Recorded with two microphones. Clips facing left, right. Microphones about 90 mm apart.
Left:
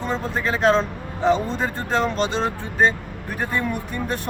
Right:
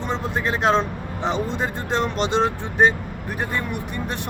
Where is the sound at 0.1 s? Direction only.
15° right (ahead or behind).